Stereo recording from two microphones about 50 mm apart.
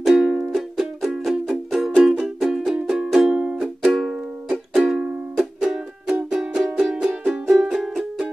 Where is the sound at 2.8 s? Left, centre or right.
Centre.